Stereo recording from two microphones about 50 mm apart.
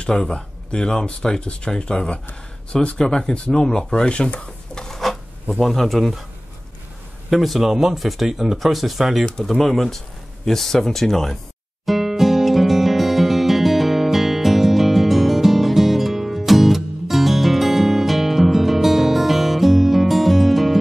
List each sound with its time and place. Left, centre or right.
0.0 s speech: centre
4.9 s rub: centre
7.2 s speech: centre
11.8 s music: centre